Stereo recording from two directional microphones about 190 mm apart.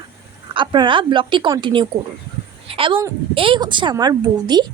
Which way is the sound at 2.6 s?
30° right (ahead or behind).